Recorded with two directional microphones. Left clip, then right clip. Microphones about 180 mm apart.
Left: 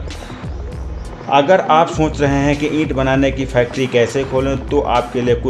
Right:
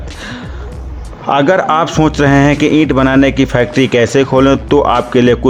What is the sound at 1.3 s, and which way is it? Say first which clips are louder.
Speech: right 1 dB; 40° right (ahead or behind).